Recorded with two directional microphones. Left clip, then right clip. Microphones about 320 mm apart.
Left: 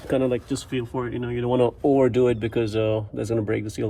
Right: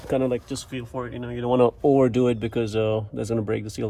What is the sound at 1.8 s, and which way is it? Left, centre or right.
Speech, right.